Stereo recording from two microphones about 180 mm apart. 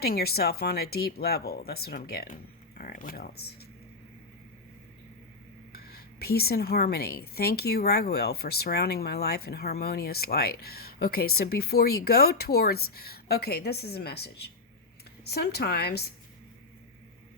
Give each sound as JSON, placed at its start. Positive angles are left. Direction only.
{"t": 0.0, "sound": "speech", "side_deg": 60}
{"t": 5.7, "sound": "speech", "side_deg": 60}